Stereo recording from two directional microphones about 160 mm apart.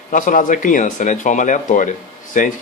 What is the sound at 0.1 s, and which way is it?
Speech, 55° left (ahead or behind).